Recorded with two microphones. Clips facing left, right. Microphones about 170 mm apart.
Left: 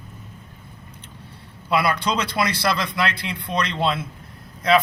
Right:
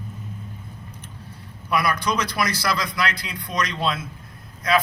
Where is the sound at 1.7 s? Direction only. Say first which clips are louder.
Left 1 dB; 30° left (ahead or behind).